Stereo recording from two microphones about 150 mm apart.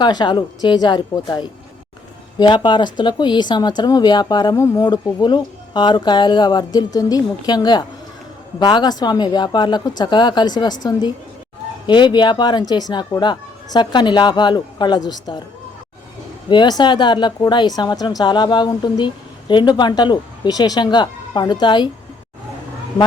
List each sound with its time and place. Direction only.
0.0 s speech: 30° left (ahead or behind)
16.5 s speech: 30° left (ahead or behind)